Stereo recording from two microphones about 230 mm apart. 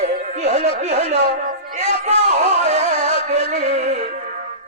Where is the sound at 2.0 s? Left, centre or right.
Right.